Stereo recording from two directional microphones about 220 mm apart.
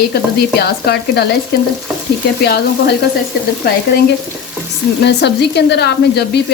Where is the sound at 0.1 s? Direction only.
45° left (ahead or behind).